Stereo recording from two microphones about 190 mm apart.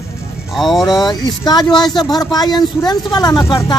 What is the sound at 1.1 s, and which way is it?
Speech, 20° left (ahead or behind).